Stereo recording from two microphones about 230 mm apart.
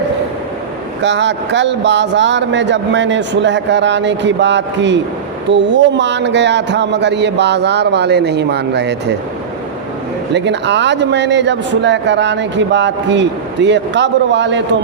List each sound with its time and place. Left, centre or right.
1.0 s speech: right
10.3 s speech: right